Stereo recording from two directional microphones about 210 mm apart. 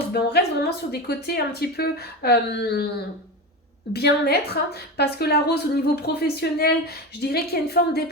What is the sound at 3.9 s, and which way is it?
A woman's voice, 50° left (ahead or behind).